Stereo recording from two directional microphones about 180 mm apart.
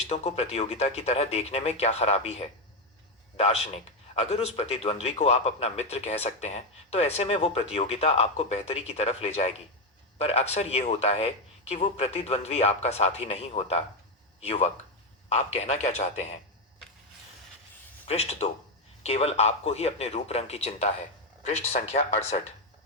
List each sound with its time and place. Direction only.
0.1 s a man's voice: 35° left (ahead or behind)
18.0 s speech: 35° left (ahead or behind)